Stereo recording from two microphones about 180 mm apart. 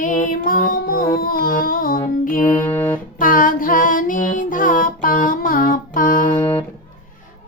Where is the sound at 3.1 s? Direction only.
50° left (ahead or behind).